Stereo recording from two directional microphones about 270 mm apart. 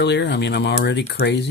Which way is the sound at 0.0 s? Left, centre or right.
Left.